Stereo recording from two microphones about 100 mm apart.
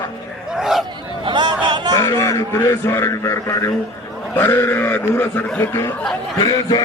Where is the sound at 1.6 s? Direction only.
45° right (ahead or behind).